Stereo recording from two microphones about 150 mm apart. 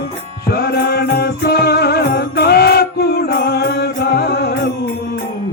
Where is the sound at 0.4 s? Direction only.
90° left.